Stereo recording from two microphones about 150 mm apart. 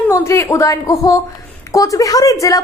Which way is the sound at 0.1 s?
20° left (ahead or behind).